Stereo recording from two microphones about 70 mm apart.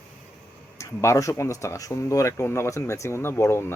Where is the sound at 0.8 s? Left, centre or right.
Left.